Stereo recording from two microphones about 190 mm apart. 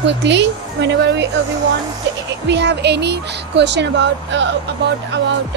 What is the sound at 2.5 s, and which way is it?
Speech, 65° right (ahead or behind).